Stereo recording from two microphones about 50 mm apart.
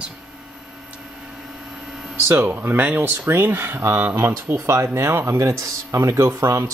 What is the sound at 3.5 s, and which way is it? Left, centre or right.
Speech, right.